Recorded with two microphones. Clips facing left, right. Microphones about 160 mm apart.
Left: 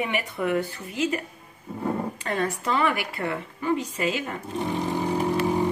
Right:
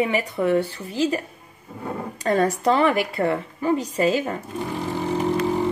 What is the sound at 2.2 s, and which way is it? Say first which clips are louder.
A woman's voice: right 9 dB; 40° right (ahead or behind).